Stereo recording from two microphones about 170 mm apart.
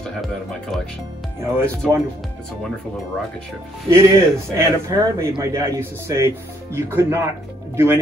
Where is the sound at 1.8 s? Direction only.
Centre (ahead or behind).